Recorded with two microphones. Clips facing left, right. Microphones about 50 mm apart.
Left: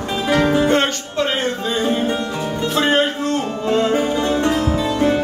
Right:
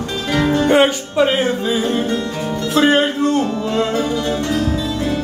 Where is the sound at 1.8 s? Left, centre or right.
Centre.